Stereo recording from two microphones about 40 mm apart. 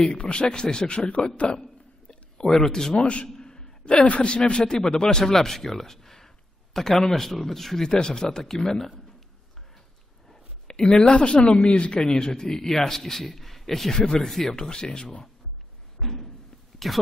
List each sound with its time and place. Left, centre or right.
0.0 s a man's voice: left
2.4 s speech: centre
3.0 s a man's voice: left
3.3 s a sound: centre
4.0 s speech: left
4.3 s a man's voice: left
10.7 s speech: centre
13.9 s speech: centre
16.0 s slam: centre
16.8 s speech: centre